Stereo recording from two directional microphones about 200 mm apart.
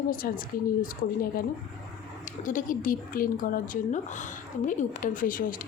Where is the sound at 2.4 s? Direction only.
40° left (ahead or behind).